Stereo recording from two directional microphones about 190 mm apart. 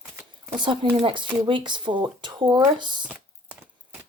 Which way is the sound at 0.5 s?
25° right (ahead or behind).